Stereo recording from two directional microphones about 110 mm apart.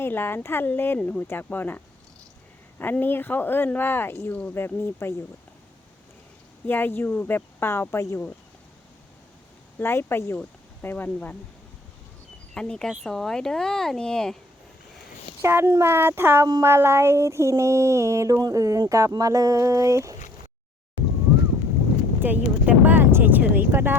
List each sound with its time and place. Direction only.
0.0 s speech: 20° left (ahead or behind)
6.7 s speech: 20° left (ahead or behind)
9.7 s speech: 20° left (ahead or behind)
12.5 s speech: 5° left (ahead or behind)
15.4 s a sound: 25° right (ahead or behind)
22.2 s a sound: 15° right (ahead or behind)